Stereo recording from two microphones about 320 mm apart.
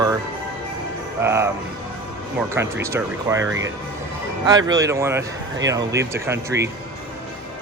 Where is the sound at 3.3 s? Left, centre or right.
Centre.